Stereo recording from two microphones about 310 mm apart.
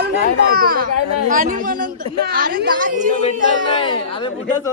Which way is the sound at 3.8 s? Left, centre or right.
Centre.